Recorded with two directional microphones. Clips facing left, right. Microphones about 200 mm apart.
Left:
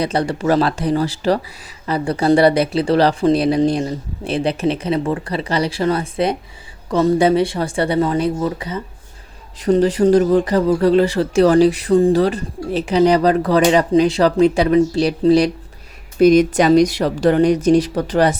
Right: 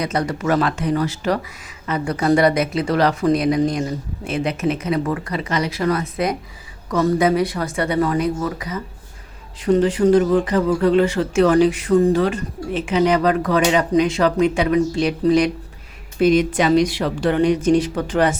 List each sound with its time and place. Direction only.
0.0 s speech: 30° left (ahead or behind)